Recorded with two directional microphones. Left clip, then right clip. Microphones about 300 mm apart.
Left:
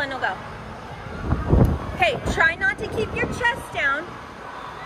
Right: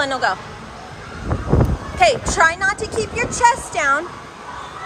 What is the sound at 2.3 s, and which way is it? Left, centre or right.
Speech, centre.